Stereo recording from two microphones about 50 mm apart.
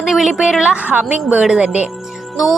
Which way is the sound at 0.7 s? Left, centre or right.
Right.